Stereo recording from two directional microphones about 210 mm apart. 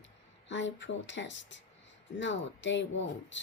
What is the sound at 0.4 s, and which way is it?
Speech, 60° left (ahead or behind).